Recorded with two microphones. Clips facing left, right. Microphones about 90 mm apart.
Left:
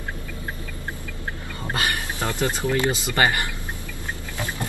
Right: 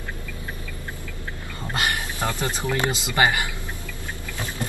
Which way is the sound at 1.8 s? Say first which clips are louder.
Right 1 dB; 20° right (ahead or behind).